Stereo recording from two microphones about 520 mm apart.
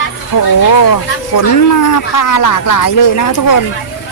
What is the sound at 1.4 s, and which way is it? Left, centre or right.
Speech, left.